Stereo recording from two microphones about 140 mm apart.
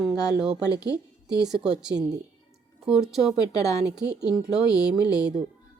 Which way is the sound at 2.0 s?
25° right (ahead or behind).